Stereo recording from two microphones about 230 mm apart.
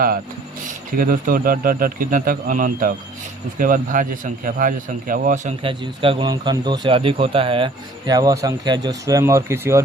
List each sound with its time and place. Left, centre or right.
0.9 s a man's voice: right; by 9.8 s centre